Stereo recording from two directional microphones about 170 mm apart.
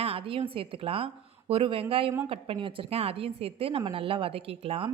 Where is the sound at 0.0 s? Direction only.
35° right (ahead or behind).